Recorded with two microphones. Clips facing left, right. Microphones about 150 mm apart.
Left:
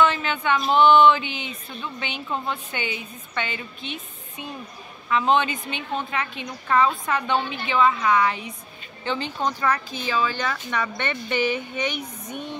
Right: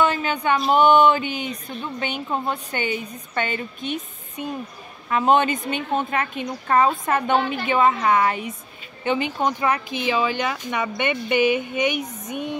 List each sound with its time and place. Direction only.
0.0 s a sound: 40° right (ahead or behind)
0.7 s a woman's voice: 45° right (ahead or behind)
9.0 s speech: 15° right (ahead or behind)